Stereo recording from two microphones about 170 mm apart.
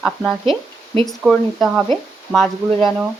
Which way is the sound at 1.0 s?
5° left (ahead or behind).